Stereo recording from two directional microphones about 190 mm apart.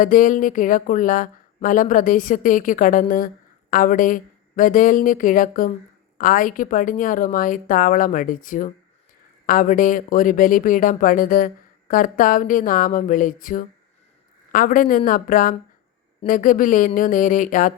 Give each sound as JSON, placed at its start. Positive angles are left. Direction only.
{"t": 0.0, "sound": "speech", "side_deg": 45}